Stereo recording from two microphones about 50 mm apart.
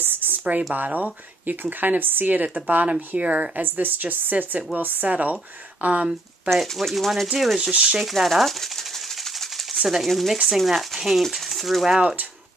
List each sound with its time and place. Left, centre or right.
0.0 s a sound: right
0.7 s a woman's voice: right
6.5 s speech: centre
7.7 s a woman's voice: centre
8.0 s speech: centre
9.8 s speech: centre